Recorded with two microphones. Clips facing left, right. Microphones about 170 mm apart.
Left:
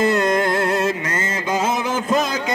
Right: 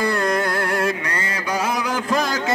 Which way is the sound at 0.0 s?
20° left (ahead or behind).